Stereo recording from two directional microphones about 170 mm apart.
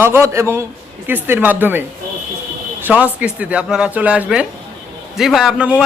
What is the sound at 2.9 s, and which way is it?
A man's voice, 10° right (ahead or behind).